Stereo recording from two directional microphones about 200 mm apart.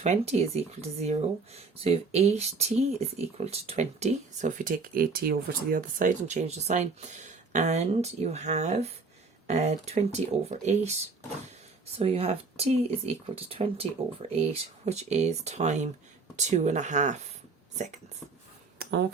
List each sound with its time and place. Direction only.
0.0 s speech: 30° right (ahead or behind)
11.9 s speech: 30° right (ahead or behind)
18.8 s a sound: 60° right (ahead or behind)